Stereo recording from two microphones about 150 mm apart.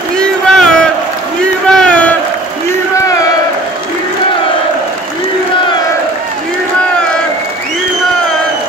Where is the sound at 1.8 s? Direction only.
10° left (ahead or behind).